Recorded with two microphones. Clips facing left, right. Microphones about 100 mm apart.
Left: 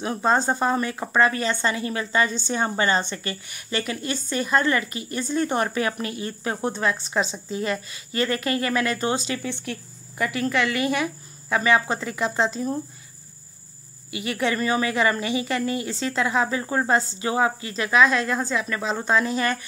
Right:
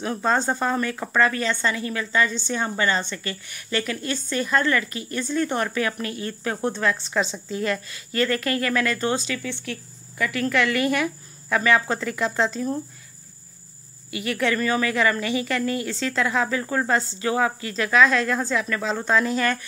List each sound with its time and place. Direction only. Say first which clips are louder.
0.0 s speech: left 1 dB; 15° left (ahead or behind)
9.7 s a woman's voice: left 1 dB; 30° left (ahead or behind)
10.3 s speech: right 2 dB; 10° left (ahead or behind)
14.1 s speech: right 1 dB; 15° left (ahead or behind)